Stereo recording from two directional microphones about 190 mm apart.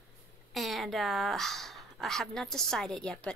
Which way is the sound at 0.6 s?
Centre (ahead or behind).